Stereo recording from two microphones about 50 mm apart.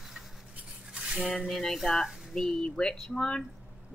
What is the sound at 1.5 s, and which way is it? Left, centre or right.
Music, centre.